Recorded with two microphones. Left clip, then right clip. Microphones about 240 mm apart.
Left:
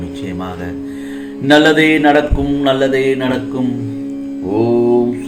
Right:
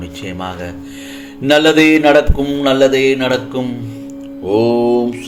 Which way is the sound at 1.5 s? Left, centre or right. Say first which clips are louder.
Even; right.